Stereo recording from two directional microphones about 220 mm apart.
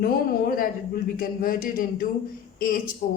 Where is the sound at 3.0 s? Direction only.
40° left (ahead or behind).